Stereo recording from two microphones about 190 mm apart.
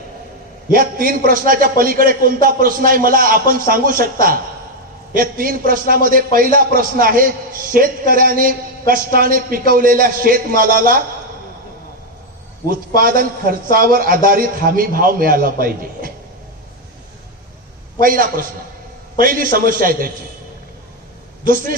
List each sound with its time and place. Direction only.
0.7 s a man's voice: 50° right (ahead or behind)
12.6 s a man's voice: 50° right (ahead or behind)
18.0 s a man's voice: 50° right (ahead or behind)
21.4 s a man's voice: 50° right (ahead or behind)